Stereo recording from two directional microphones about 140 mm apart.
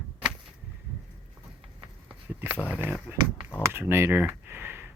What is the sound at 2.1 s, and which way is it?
Speech, 10° right (ahead or behind).